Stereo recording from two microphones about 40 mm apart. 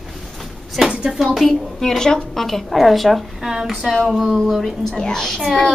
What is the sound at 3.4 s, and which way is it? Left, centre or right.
Speech, centre.